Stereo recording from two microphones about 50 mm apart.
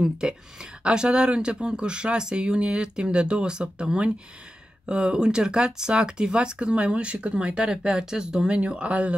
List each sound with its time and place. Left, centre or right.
0.0 s speech: centre